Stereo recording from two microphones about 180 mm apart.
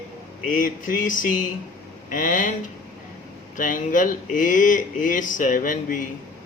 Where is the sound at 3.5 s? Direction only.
45° left (ahead or behind).